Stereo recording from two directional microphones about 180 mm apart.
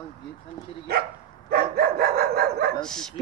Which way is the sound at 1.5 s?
60° right (ahead or behind).